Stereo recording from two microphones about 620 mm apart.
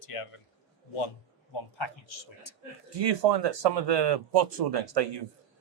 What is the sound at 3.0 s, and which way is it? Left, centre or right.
Speech, right.